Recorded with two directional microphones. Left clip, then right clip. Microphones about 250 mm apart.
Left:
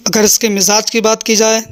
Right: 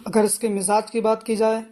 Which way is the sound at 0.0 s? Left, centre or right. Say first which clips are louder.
Left 9 dB; left.